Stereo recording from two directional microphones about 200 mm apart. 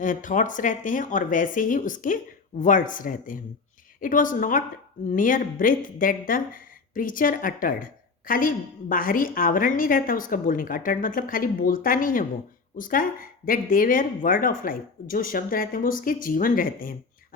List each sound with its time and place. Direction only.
0.0 s speech: 40° left (ahead or behind)